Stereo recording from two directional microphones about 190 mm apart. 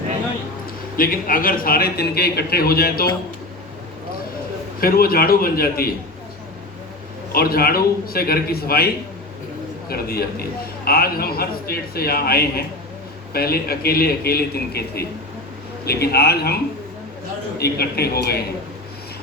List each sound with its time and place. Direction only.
0.9 s a man's voice: 50° left (ahead or behind)
4.8 s a man's voice: 50° left (ahead or behind)
7.3 s a man's voice: 50° left (ahead or behind)
9.9 s a man's voice: 55° left (ahead or behind)
17.6 s a man's voice: 55° left (ahead or behind)